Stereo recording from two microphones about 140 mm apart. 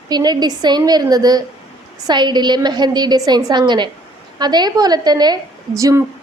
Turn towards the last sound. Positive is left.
turn(degrees=-25)  # may be behind; listen again after turning